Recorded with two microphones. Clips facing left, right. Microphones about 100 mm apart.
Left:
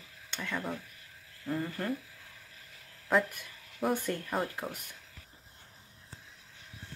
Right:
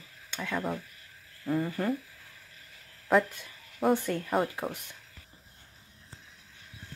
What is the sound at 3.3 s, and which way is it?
Speech, 25° right (ahead or behind).